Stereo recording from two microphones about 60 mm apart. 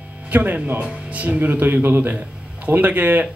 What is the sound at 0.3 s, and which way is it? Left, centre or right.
Speech, right.